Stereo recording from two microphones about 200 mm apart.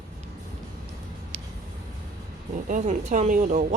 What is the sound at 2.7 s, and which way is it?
Speech, 40° right (ahead or behind).